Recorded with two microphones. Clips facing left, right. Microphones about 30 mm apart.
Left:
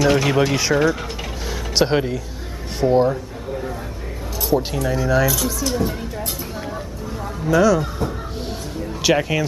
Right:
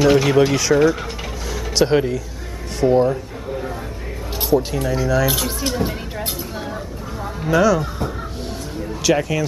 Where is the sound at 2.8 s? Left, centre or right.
Centre.